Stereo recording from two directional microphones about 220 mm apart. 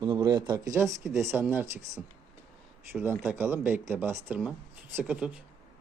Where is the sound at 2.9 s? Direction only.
10° right (ahead or behind).